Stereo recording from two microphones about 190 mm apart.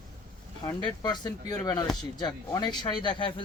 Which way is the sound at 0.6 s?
20° left (ahead or behind).